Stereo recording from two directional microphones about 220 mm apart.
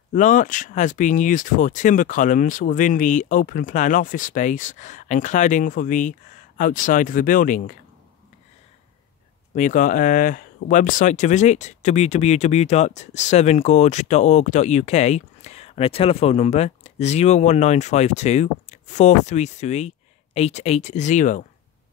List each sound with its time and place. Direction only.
0.1 s speech: 35° left (ahead or behind)
9.6 s speech: 35° left (ahead or behind)